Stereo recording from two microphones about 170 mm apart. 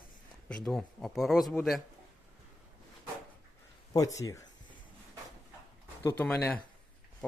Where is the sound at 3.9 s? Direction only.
20° left (ahead or behind).